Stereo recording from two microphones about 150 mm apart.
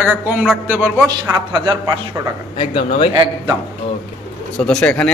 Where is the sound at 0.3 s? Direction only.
5° right (ahead or behind).